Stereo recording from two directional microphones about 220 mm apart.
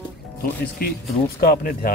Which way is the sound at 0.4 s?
45° left (ahead or behind).